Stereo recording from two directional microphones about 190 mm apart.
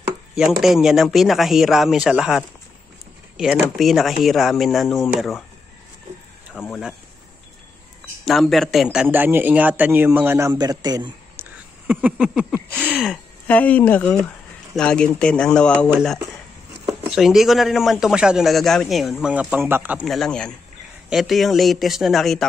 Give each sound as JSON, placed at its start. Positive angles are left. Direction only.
{"t": 0.4, "sound": "a man's voice", "side_deg": 0}
{"t": 6.7, "sound": "a man's voice", "side_deg": -5}
{"t": 8.3, "sound": "a man's voice", "side_deg": 0}
{"t": 11.3, "sound": "a sound", "side_deg": -10}
{"t": 12.9, "sound": "a man's voice", "side_deg": 5}
{"t": 17.1, "sound": "a man's voice", "side_deg": 0}